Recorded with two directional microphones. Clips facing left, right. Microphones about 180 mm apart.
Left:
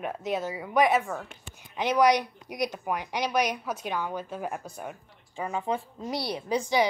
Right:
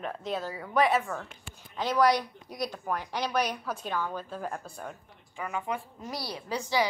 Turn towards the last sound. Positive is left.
turn(degrees=20)  # may be behind; listen again after turning